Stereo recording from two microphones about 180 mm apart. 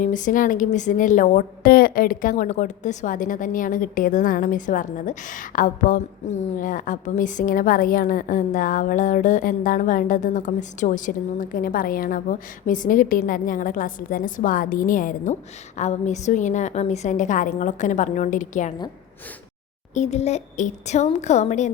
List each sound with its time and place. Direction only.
0.0 s a woman's voice: 45° left (ahead or behind)
19.9 s a woman's voice: 40° left (ahead or behind)